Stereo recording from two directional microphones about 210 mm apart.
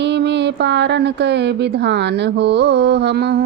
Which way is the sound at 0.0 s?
55° right (ahead or behind).